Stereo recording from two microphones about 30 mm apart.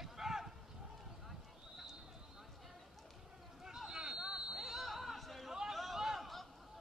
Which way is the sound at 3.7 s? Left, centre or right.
Centre.